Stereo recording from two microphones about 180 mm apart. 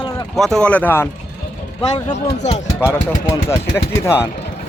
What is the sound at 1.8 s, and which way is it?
Speech, 30° left (ahead or behind).